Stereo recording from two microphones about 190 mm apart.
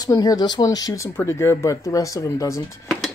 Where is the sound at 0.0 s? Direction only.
20° left (ahead or behind).